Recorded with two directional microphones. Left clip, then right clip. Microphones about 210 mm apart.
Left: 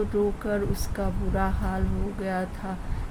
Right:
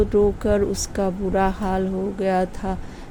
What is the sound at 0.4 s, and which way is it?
Speech, 35° right (ahead or behind).